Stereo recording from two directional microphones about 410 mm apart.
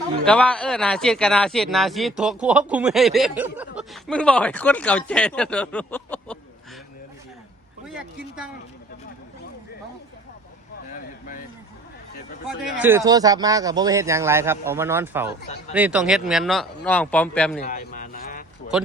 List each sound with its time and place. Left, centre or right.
0.3 s a man's voice: centre
12.5 s a man's voice: centre
17.6 s a sound: centre